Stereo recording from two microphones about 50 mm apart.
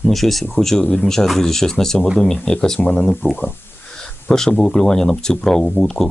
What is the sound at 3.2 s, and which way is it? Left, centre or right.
Speech, left.